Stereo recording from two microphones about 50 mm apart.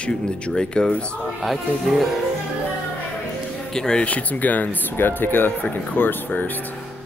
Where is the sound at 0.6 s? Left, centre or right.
Centre.